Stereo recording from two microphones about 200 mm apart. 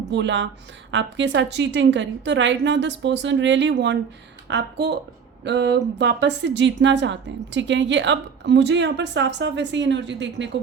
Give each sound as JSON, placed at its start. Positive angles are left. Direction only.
{"t": 0.1, "sound": "a woman's voice", "side_deg": -65}